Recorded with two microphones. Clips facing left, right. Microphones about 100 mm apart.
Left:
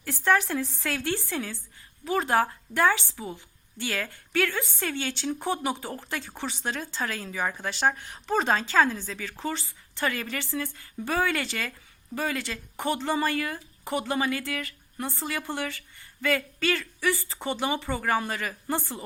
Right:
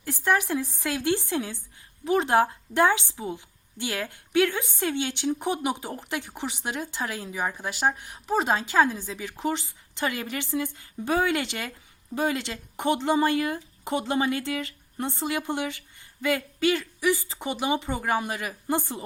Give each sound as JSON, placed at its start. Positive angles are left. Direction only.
{"t": 0.0, "sound": "a woman's voice", "side_deg": -15}